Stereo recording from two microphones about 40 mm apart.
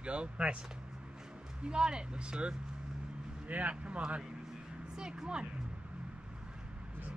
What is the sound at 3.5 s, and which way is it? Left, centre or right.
Speech, right.